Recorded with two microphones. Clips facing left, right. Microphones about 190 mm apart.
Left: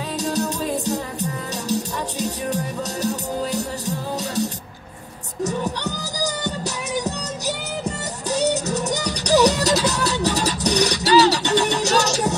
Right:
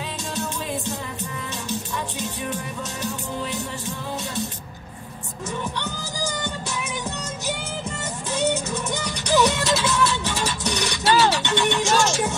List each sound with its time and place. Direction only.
0.2 s music: 40° left (ahead or behind)